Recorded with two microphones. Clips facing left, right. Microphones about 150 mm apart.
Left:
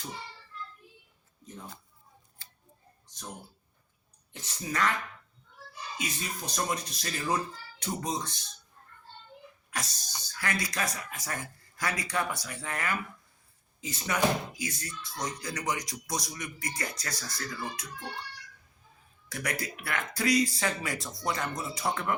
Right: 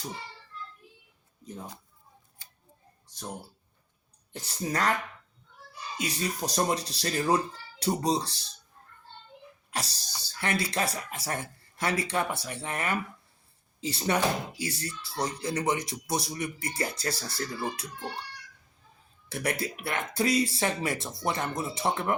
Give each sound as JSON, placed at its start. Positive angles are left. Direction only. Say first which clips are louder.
{"t": 4.3, "sound": "speech", "louder": "right 4 dB", "side_deg": -35}
{"t": 6.0, "sound": "speech", "louder": "right 6 dB", "side_deg": -35}
{"t": 9.6, "sound": "a sound", "louder": "right 3 dB", "side_deg": -30}
{"t": 10.2, "sound": "speech", "louder": "right 3 dB", "side_deg": -30}
{"t": 19.3, "sound": "speech", "louder": "right 4 dB", "side_deg": -30}